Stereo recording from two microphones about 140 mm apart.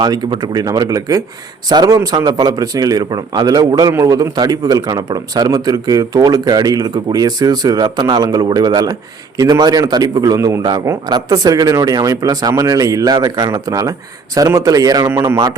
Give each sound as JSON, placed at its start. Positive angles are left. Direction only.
{"t": 0.0, "sound": "a man's voice", "side_deg": -30}